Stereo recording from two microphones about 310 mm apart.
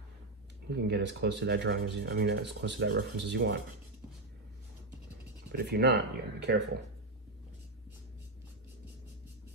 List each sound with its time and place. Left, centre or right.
0.7 s rub: right
5.5 s rub: right